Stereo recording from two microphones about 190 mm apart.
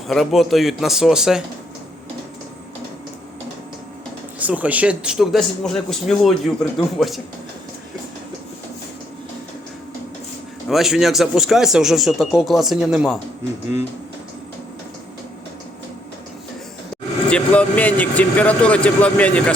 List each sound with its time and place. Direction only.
0.1 s a man's voice: centre (ahead or behind)
4.4 s a man's voice: 10° right (ahead or behind)
10.7 s a man's voice: centre (ahead or behind)
17.2 s speech: 5° left (ahead or behind)